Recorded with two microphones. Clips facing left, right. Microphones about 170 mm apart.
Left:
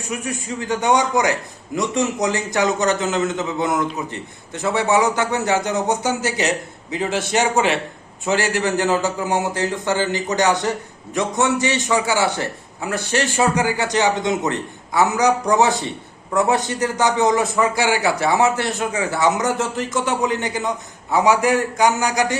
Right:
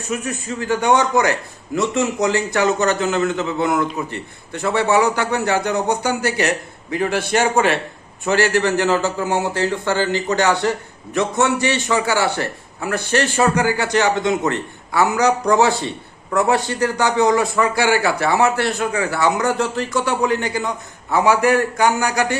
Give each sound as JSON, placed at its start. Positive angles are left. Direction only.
{"t": 0.3, "sound": "a man's voice", "side_deg": 15}
{"t": 7.3, "sound": "a man's voice", "side_deg": 15}